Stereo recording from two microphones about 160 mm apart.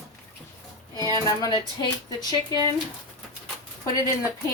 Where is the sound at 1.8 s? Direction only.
25° left (ahead or behind).